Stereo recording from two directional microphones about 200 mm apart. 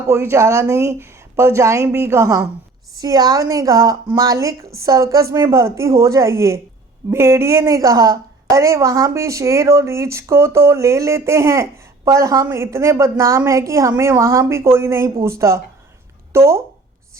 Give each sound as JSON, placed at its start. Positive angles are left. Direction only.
{"t": 0.1, "sound": "a woman's voice", "side_deg": -10}